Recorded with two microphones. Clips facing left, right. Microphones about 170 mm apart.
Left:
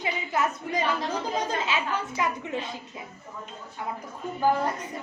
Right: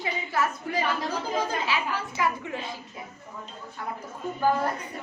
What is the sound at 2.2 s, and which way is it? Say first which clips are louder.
Speech: right 2 dB; 20° left (ahead or behind).